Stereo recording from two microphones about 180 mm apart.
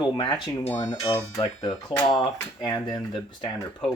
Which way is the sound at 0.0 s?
25° left (ahead or behind).